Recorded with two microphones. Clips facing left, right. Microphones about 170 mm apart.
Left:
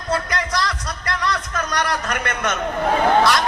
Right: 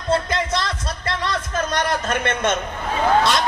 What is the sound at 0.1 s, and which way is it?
Music, 25° right (ahead or behind).